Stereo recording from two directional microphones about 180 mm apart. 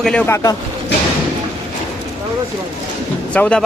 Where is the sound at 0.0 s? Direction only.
5° left (ahead or behind).